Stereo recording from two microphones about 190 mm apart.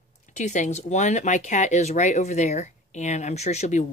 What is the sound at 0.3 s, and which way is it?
Speech, 40° left (ahead or behind).